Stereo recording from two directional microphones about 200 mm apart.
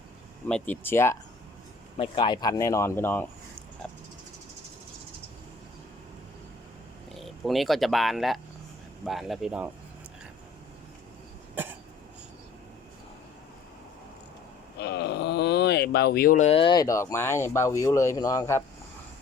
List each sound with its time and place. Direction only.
0.4 s speech: 10° left (ahead or behind)
2.0 s speech: 25° left (ahead or behind)
7.1 s speech: centre (ahead or behind)
11.5 s cough: 10° right (ahead or behind)
14.8 s speech: 55° left (ahead or behind); by 18.6 s 15° left (ahead or behind)